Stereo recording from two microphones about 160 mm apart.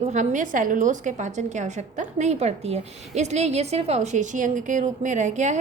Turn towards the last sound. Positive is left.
turn(degrees=-50)  # may be behind; listen again after turning